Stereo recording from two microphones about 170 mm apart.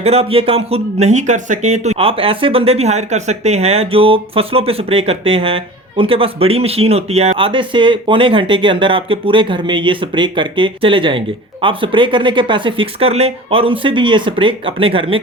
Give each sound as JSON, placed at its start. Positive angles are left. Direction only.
{"t": 0.0, "sound": "speech", "side_deg": -35}